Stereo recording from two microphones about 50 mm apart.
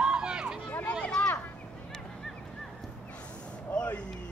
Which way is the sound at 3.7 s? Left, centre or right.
Left.